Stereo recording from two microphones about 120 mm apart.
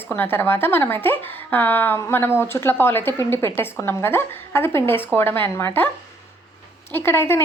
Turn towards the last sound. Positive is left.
turn(degrees=20)  # may be behind; listen again after turning